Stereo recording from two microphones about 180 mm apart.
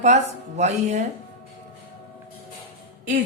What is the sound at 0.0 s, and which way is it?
Speech, 40° right (ahead or behind).